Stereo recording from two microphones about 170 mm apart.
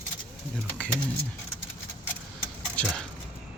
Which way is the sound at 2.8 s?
5° left (ahead or behind).